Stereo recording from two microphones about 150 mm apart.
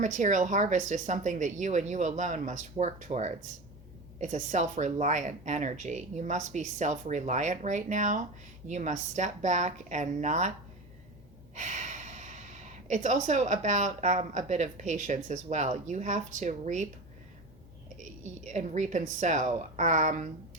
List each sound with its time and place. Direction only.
0.0 s speech: 55° right (ahead or behind)
11.5 s speech: 55° right (ahead or behind)
17.9 s speech: 55° right (ahead or behind)